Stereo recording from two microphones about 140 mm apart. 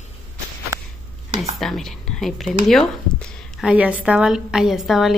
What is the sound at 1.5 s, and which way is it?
A woman's voice, centre (ahead or behind).